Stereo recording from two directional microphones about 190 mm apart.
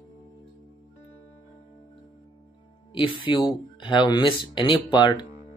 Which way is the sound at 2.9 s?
25° left (ahead or behind).